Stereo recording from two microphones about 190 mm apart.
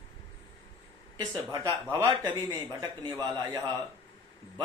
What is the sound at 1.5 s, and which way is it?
Speech, 15° right (ahead or behind).